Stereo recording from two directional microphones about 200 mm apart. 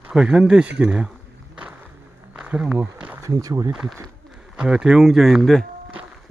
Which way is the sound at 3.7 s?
5° right (ahead or behind).